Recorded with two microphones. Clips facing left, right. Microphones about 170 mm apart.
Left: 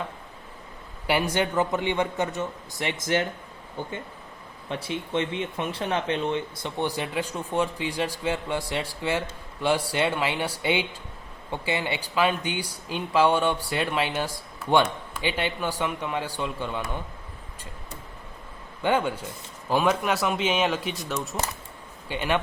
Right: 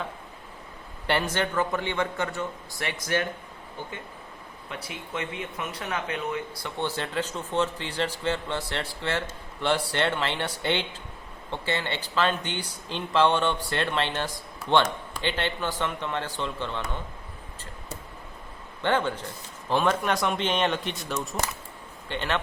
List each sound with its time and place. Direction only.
1.0 s speech: 10° left (ahead or behind)
4.7 s speech: 25° left (ahead or behind); by 17.0 s 10° left (ahead or behind)
18.8 s a man's voice: 10° left (ahead or behind)